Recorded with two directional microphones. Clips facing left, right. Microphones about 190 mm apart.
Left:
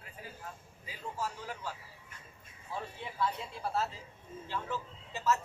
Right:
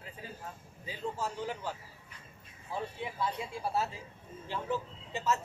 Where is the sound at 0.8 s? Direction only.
25° right (ahead or behind).